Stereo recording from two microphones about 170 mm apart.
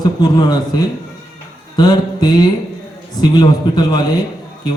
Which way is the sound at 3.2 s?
25° left (ahead or behind).